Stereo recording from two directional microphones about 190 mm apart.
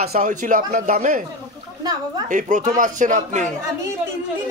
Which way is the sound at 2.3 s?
45° right (ahead or behind).